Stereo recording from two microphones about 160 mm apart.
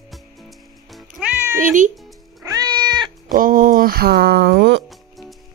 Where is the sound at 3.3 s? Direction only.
60° right (ahead or behind); by 4.8 s 90° right.